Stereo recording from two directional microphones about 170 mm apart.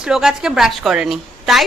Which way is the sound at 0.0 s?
5° right (ahead or behind).